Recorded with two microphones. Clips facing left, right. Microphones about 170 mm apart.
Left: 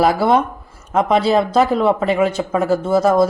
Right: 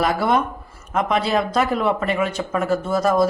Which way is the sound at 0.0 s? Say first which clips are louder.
Left 5 dB; 30° left (ahead or behind).